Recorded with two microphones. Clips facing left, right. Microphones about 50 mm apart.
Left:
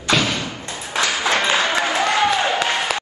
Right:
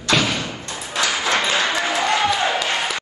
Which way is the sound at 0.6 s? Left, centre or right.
Left.